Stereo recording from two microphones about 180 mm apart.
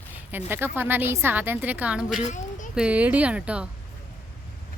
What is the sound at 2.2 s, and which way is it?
Speech, 40° left (ahead or behind).